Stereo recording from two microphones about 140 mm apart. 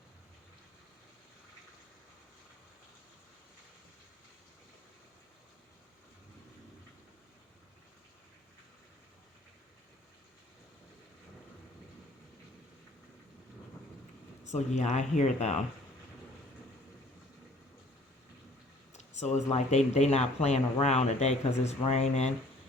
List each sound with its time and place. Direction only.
14.4 s speech: 55° left (ahead or behind)
18.9 s speech: 55° left (ahead or behind)